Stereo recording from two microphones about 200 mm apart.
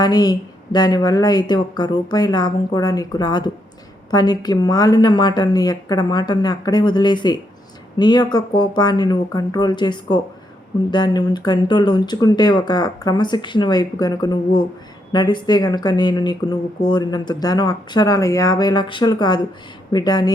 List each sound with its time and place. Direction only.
0.0 s speech: 20° left (ahead or behind)